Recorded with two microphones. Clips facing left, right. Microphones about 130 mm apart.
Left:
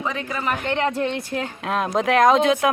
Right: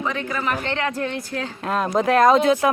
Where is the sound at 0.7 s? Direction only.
20° left (ahead or behind).